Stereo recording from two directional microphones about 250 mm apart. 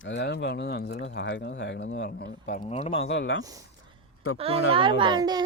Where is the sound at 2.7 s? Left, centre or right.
Left.